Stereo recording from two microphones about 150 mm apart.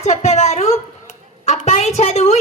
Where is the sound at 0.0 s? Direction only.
50° left (ahead or behind).